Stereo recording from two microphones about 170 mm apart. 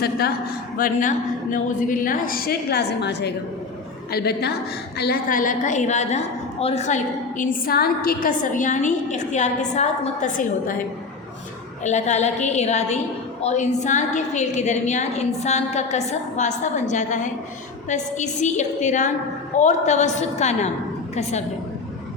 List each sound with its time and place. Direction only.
0.0 s a woman's voice: 65° left (ahead or behind)
0.8 s a woman's voice: 50° left (ahead or behind)
3.0 s a woman's voice: 80° left
4.1 s a woman's voice: 70° left (ahead or behind); by 10.8 s 50° left (ahead or behind)
11.8 s a woman's voice: 45° left (ahead or behind)